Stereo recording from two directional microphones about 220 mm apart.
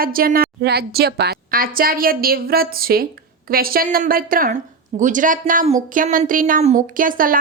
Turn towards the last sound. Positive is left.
turn(degrees=-40)  # may be behind; listen again after turning